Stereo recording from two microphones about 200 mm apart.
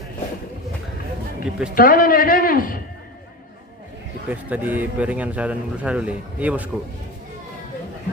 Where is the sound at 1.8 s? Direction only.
45° left (ahead or behind).